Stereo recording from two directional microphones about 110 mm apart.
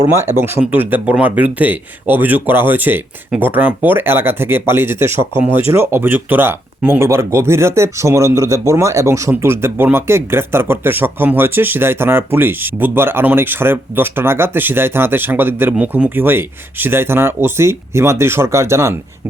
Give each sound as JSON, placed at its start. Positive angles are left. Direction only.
{"t": 0.1, "sound": "speech", "side_deg": -25}